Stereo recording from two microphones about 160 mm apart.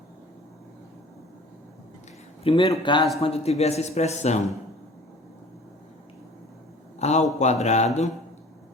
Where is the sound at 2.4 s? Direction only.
35° left (ahead or behind).